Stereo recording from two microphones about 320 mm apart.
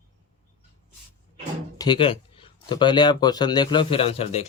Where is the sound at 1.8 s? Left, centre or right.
Centre.